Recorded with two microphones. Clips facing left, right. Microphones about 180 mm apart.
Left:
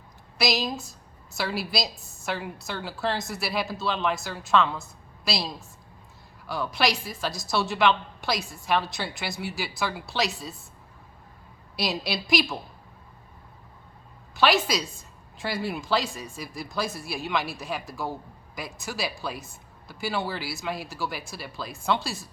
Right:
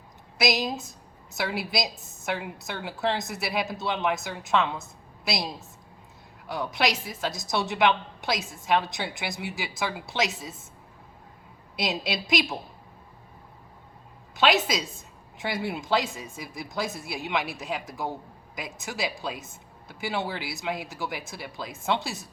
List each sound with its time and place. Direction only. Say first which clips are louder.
0.3 s a man's voice: right 1 dB; 20° right (ahead or behind)
11.8 s a man's voice: even; 20° right (ahead or behind)
14.3 s a man's voice: left 1 dB; 20° right (ahead or behind)